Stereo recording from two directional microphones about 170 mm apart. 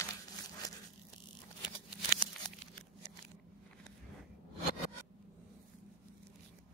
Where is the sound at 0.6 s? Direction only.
20° left (ahead or behind).